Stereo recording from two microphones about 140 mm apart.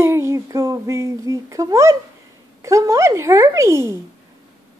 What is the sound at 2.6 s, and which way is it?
Speech, 20° right (ahead or behind).